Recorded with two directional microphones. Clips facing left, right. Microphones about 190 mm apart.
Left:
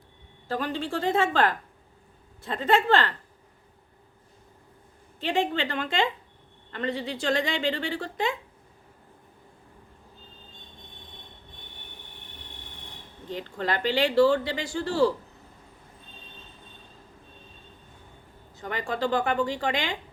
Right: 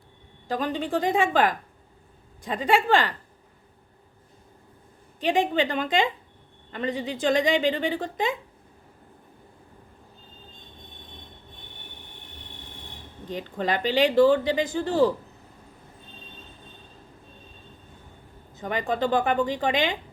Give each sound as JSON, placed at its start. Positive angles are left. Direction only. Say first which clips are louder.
{"t": 0.4, "sound": "speech", "louder": "right 2 dB", "side_deg": -15}
{"t": 5.2, "sound": "speech", "louder": "right 4 dB", "side_deg": -15}
{"t": 13.3, "sound": "speech", "louder": "right 2 dB", "side_deg": -15}
{"t": 18.5, "sound": "speech", "louder": "right 4 dB", "side_deg": -20}